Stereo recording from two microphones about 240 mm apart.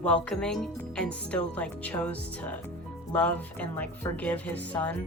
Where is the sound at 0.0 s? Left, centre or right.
Centre.